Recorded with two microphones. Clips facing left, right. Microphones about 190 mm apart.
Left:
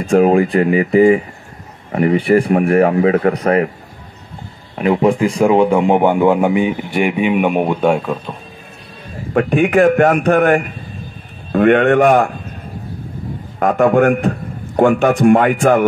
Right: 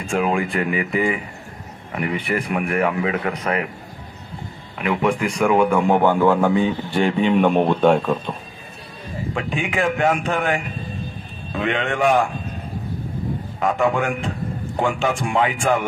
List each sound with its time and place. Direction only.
0.0 s a man's voice: 35° left (ahead or behind)
4.7 s a man's voice: 35° left (ahead or behind); by 8.4 s 5° left (ahead or behind)
9.3 s a man's voice: 55° left (ahead or behind)
13.6 s a man's voice: 40° left (ahead or behind)
13.9 s a man's voice: 60° left (ahead or behind)
15.2 s speech: 50° left (ahead or behind)